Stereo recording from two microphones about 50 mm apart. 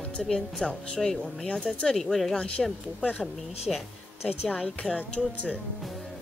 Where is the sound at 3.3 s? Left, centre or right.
Centre.